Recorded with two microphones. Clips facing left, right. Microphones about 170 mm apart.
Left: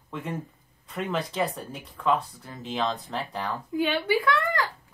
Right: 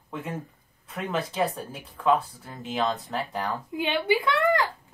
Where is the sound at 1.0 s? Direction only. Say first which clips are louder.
Right 1 dB; 5° right (ahead or behind).